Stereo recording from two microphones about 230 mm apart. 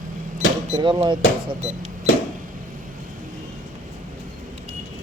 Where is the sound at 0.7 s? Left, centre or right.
Centre.